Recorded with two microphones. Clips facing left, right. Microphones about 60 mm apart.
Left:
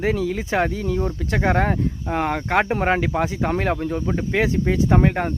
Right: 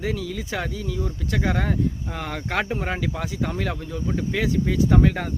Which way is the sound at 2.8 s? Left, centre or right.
Left.